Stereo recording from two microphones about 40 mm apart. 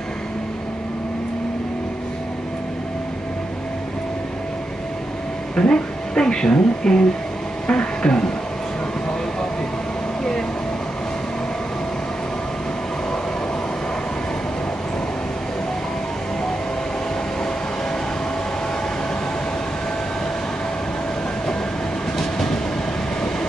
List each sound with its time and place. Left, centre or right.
5.6 s speech: left
22.2 s train: centre